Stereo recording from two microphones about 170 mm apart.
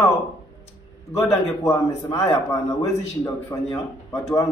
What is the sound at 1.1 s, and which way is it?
A man's voice, 15° left (ahead or behind).